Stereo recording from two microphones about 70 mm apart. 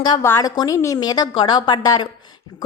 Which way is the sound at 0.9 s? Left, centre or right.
Left.